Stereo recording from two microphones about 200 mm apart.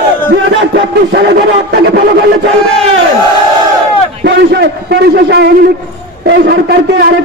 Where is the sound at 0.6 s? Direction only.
60° right (ahead or behind).